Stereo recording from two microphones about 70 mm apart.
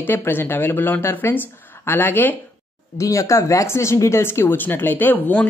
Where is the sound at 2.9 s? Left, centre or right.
Left.